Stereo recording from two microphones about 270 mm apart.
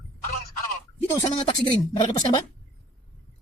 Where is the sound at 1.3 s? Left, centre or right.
Left.